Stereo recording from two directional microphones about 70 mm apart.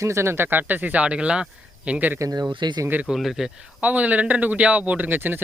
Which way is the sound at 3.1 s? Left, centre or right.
Centre.